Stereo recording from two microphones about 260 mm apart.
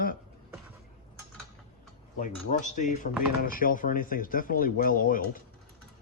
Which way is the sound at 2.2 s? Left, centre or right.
Left.